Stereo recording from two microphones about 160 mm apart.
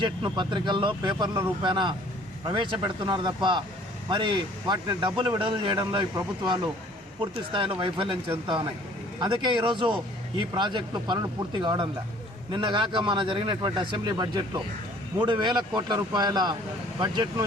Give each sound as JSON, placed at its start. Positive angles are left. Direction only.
{"t": 0.0, "sound": "a man's voice", "side_deg": -30}